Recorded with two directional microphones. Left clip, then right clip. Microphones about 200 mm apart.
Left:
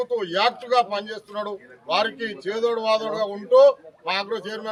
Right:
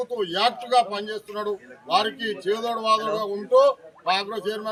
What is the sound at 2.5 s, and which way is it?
Speech, 25° left (ahead or behind).